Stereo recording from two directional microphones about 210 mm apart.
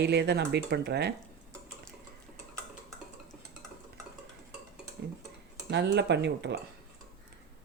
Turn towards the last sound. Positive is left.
turn(degrees=-55)  # may be behind; listen again after turning